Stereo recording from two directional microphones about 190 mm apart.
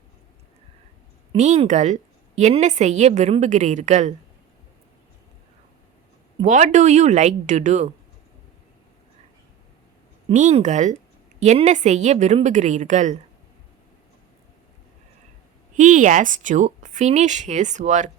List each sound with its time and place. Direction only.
1.3 s a woman's voice: 35° right (ahead or behind)
6.4 s a woman's voice: 40° right (ahead or behind)
10.2 s a woman's voice: 35° right (ahead or behind)
15.7 s a woman's voice: 40° right (ahead or behind)